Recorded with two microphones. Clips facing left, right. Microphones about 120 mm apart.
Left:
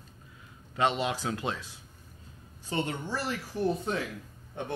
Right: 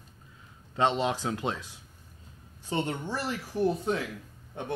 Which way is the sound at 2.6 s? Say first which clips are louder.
Right 1 dB; 20° right (ahead or behind).